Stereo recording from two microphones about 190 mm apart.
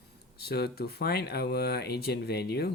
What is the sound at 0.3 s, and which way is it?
Speech, 55° left (ahead or behind).